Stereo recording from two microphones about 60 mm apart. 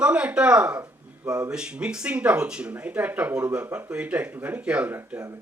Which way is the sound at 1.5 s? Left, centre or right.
Centre.